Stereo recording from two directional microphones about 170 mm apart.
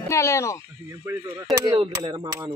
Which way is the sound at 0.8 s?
15° right (ahead or behind).